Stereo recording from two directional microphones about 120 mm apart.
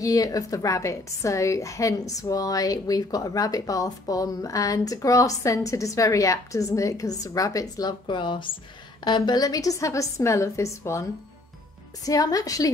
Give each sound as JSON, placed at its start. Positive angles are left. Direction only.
{"t": 0.0, "sound": "speech", "side_deg": 30}